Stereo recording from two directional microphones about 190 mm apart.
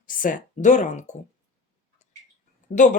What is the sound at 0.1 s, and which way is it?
Speech, 45° left (ahead or behind).